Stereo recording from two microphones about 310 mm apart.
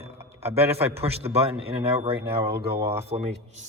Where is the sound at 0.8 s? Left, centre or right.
Centre.